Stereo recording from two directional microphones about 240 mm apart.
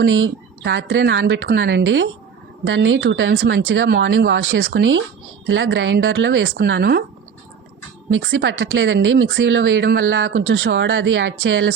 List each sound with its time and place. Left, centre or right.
0.0 s speech: right
8.1 s speech: right